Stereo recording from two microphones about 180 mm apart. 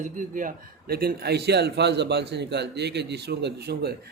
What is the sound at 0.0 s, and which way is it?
A man's voice, 45° right (ahead or behind).